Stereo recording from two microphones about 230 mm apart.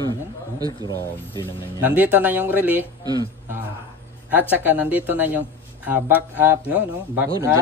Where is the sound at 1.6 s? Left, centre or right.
Centre.